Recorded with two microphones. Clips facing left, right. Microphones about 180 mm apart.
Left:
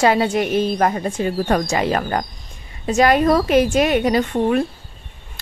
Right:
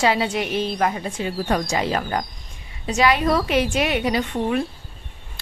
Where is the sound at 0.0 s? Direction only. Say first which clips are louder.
Left 4 dB; 50° left (ahead or behind).